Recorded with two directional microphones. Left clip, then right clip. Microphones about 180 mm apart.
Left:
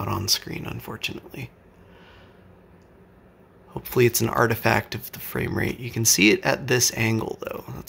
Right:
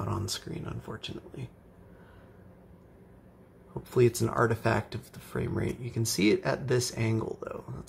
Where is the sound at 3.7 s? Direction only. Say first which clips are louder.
Left 5 dB; 20° left (ahead or behind).